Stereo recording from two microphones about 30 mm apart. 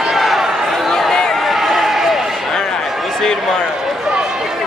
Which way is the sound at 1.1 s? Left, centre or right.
Centre.